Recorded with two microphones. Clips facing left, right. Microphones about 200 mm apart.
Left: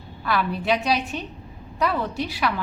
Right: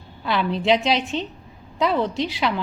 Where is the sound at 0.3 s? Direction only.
25° right (ahead or behind).